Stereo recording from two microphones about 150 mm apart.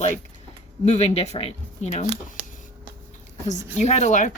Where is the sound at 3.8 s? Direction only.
50° left (ahead or behind).